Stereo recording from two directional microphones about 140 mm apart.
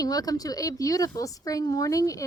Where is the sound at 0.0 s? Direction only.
25° left (ahead or behind).